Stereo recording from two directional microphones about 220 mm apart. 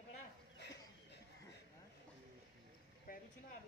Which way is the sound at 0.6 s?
50° left (ahead or behind).